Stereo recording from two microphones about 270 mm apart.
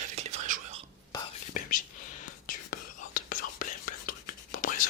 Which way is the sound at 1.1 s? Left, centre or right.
Centre.